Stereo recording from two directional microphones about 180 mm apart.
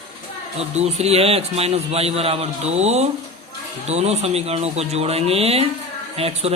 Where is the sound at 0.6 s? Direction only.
35° right (ahead or behind).